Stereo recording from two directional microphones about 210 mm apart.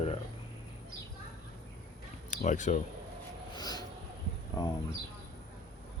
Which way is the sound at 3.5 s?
20° left (ahead or behind).